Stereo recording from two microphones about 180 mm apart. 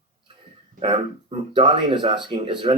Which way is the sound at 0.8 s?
30° right (ahead or behind).